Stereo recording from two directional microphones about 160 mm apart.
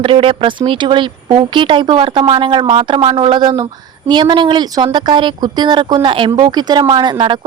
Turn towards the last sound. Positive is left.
turn(degrees=-30)  # may be behind; listen again after turning